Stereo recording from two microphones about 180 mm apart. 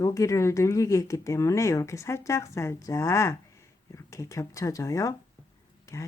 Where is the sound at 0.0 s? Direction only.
15° left (ahead or behind).